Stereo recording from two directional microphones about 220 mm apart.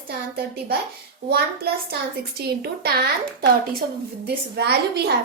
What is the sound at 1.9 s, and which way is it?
A woman's voice, 45° right (ahead or behind).